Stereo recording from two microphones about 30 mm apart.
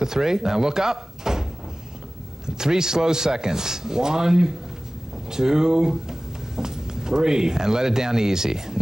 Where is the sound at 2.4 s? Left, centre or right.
Centre.